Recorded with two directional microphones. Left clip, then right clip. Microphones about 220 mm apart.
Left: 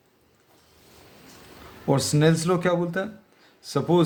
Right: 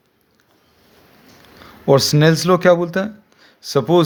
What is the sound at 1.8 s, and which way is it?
Speech, 40° right (ahead or behind).